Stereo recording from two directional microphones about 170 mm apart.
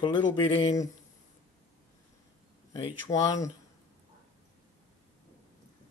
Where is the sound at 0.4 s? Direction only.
30° left (ahead or behind).